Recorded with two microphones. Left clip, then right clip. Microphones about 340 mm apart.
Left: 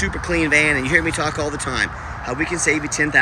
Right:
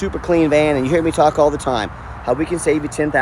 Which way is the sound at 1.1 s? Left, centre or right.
Right.